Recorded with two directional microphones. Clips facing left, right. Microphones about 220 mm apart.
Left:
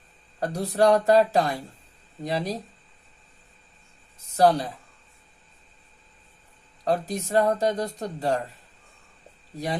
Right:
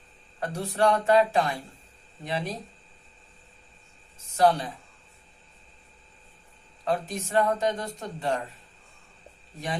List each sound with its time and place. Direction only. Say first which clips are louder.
0.3 s speech: left 4 dB; 40° left (ahead or behind)
4.4 s speech: left 2 dB; 40° left (ahead or behind)
6.8 s speech: left 3 dB; 35° left (ahead or behind)